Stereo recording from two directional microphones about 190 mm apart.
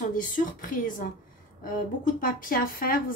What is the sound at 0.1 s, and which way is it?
Speech, 45° left (ahead or behind).